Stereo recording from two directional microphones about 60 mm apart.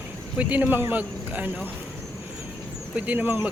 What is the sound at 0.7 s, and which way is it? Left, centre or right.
Speech, right.